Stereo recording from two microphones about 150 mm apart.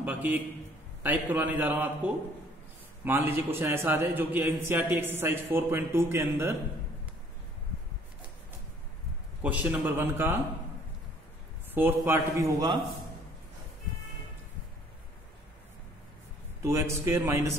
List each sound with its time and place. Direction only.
0.0 s a man's voice: 10° right (ahead or behind)
9.4 s a man's voice: 10° right (ahead or behind)
11.7 s a man's voice: 10° right (ahead or behind)
16.6 s a man's voice: 20° right (ahead or behind)